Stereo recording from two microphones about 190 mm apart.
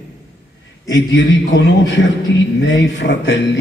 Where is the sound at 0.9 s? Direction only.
75° left (ahead or behind).